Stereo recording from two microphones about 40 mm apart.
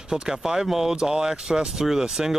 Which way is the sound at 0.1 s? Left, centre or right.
Centre.